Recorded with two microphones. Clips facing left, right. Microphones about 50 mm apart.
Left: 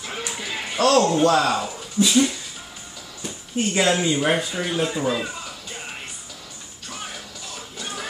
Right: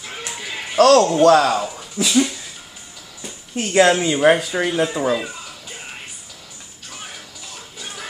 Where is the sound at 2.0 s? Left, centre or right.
Right.